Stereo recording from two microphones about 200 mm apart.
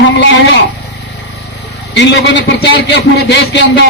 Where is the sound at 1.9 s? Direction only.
60° left (ahead or behind).